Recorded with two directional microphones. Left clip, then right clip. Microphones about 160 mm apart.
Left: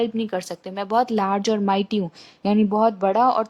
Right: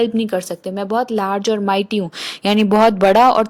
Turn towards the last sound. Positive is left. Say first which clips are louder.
# right 7 dB
turn(degrees=-30)  # may be behind; listen again after turning